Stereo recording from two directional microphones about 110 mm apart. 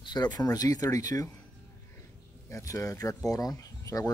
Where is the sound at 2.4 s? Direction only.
25° left (ahead or behind).